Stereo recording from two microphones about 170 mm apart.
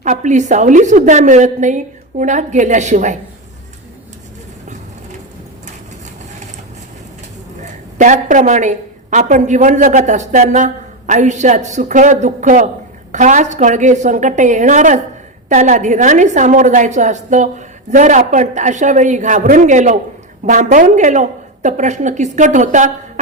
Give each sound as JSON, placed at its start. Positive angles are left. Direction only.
{"t": 0.0, "sound": "a woman's voice", "side_deg": -45}
{"t": 7.9, "sound": "a woman's voice", "side_deg": -45}